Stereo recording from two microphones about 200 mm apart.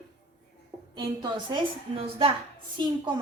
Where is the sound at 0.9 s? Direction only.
25° right (ahead or behind).